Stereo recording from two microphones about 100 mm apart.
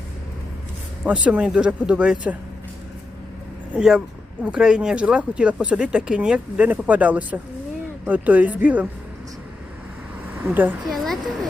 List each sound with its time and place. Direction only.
1.0 s speech: 15° right (ahead or behind)
3.8 s speech: 5° right (ahead or behind)
10.5 s speech: 20° right (ahead or behind)
10.9 s speech: centre (ahead or behind)